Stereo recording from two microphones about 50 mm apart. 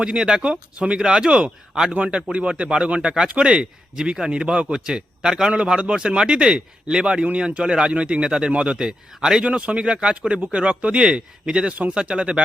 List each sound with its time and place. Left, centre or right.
0.0 s speech: centre
9.5 s speech: right